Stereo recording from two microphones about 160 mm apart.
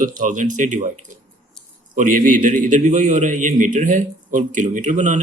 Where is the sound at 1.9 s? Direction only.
55° right (ahead or behind).